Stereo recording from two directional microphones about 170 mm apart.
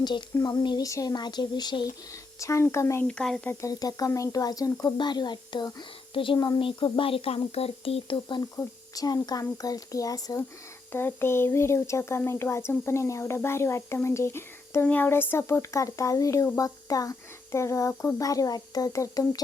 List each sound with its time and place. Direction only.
0.0 s speech: 25° left (ahead or behind)
3.1 s speech: 5° left (ahead or behind)
3.5 s speech: 20° left (ahead or behind)